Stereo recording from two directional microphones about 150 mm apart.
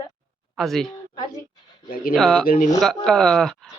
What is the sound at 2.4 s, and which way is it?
Speech, 60° left (ahead or behind).